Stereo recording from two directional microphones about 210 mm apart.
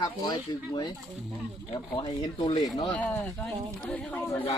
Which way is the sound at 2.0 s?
20° left (ahead or behind).